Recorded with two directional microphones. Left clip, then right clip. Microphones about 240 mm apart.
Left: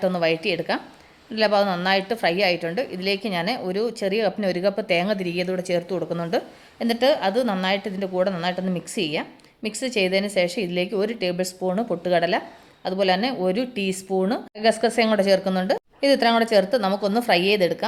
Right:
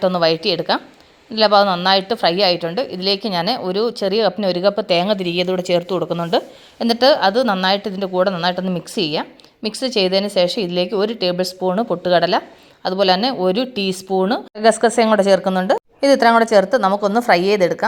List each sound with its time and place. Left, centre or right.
0.0 s a woman's voice: centre